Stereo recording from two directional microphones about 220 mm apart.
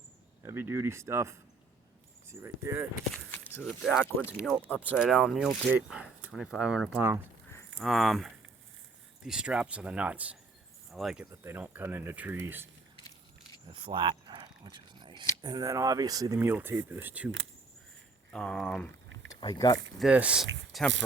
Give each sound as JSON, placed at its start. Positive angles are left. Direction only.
{"t": 0.4, "sound": "speech", "side_deg": -10}
{"t": 3.3, "sound": "speech", "side_deg": 10}
{"t": 13.7, "sound": "a sound", "side_deg": -25}
{"t": 15.4, "sound": "speech", "side_deg": -20}
{"t": 18.3, "sound": "speech", "side_deg": 5}
{"t": 19.3, "sound": "speech", "side_deg": 15}
{"t": 20.0, "sound": "speech", "side_deg": -5}